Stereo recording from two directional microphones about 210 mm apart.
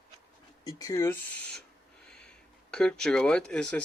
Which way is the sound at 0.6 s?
15° left (ahead or behind).